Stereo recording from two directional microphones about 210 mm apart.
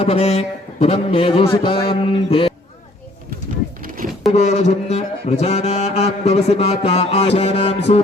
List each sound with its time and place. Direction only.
0.0 s a man's voice: 30° left (ahead or behind)
3.8 s a sound: 40° right (ahead or behind)
4.3 s music: 30° left (ahead or behind)